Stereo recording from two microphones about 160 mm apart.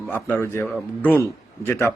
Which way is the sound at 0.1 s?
10° left (ahead or behind).